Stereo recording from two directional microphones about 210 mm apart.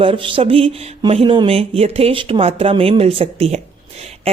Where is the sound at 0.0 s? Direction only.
25° right (ahead or behind).